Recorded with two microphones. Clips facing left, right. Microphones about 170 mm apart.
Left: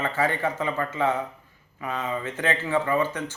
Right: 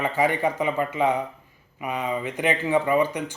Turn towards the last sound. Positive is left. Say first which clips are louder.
# right 3 dB
turn(degrees=-15)  # may be behind; listen again after turning